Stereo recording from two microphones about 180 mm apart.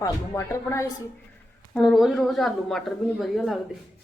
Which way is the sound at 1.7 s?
Centre (ahead or behind).